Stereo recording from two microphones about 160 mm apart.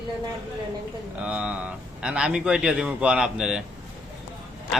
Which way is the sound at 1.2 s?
10° right (ahead or behind).